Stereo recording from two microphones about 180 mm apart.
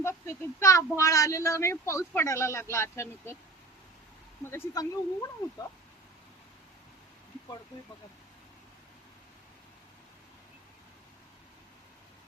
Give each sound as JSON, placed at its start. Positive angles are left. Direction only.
{"t": 0.0, "sound": "speech", "side_deg": 15}
{"t": 4.5, "sound": "speech", "side_deg": 20}